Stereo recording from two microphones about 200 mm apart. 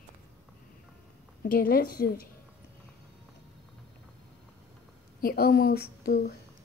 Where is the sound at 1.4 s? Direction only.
45° left (ahead or behind).